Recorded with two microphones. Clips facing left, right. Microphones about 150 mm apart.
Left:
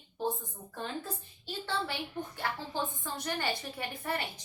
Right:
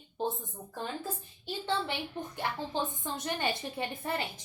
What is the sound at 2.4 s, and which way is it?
A woman's voice, 20° right (ahead or behind).